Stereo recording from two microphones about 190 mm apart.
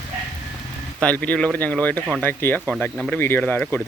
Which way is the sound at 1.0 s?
5° left (ahead or behind).